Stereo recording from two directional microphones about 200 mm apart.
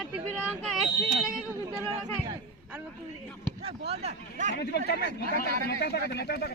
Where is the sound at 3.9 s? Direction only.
30° right (ahead or behind).